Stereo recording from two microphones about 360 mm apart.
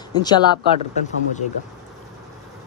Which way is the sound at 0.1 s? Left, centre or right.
Centre.